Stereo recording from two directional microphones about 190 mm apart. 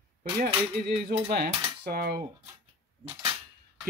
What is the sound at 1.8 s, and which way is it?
Speech, 55° right (ahead or behind).